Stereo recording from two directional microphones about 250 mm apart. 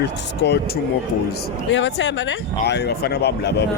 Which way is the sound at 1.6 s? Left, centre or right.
Left.